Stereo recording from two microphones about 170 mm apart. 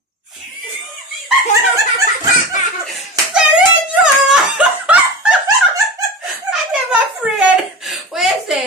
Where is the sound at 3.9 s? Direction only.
5° right (ahead or behind).